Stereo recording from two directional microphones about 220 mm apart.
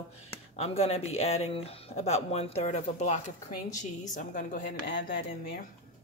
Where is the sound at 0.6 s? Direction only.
30° left (ahead or behind).